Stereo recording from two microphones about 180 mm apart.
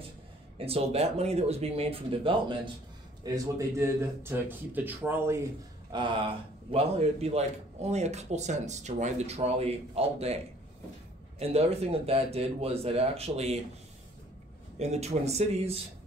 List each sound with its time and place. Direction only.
0.6 s speech: 35° right (ahead or behind)
3.3 s speech: 15° right (ahead or behind); by 13.6 s 35° right (ahead or behind)
14.8 s speech: 35° right (ahead or behind)